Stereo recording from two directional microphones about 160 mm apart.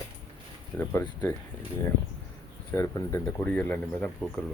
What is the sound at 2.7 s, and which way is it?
Speech, 15° left (ahead or behind).